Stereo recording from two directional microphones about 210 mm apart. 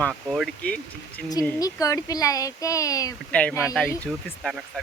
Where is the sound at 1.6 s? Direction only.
15° left (ahead or behind).